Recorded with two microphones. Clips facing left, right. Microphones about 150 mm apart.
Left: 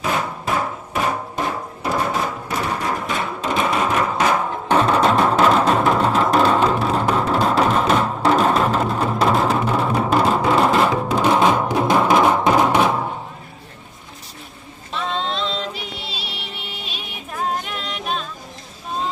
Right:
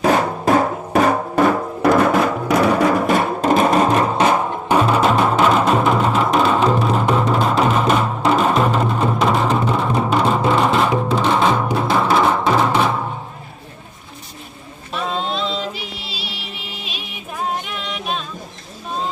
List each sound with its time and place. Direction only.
0.0 s music: 45° right (ahead or behind)
1.8 s music: 90° right; by 4.3 s 35° right (ahead or behind)
4.3 s music: 20° right (ahead or behind)
4.7 s music: 10° right (ahead or behind)
11.1 s music: 10° left (ahead or behind)
14.9 s music: 5° right (ahead or behind)
17.9 s female singing: 5° right (ahead or behind)